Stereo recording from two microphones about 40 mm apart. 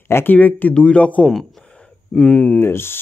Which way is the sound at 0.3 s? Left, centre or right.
Left.